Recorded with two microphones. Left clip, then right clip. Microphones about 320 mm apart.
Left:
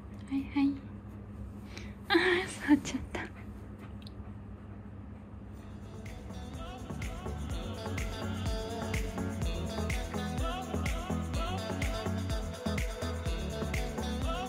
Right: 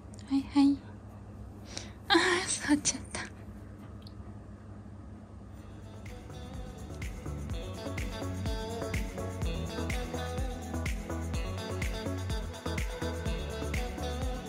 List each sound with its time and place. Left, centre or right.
0.3 s a woman's voice: centre
2.0 s a sound: centre
7.0 s music: centre